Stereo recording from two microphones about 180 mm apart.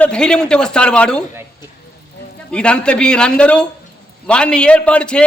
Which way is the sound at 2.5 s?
5° left (ahead or behind).